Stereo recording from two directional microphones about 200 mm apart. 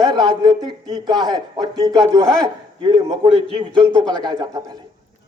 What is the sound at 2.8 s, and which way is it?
A man's voice, 15° right (ahead or behind).